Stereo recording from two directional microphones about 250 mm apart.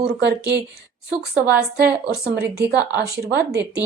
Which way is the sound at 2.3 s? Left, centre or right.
Right.